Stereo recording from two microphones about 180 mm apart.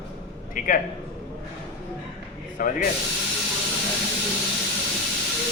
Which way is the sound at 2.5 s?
50° left (ahead or behind).